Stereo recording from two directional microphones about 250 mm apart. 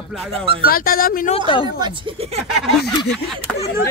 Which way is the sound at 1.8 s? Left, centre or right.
Centre.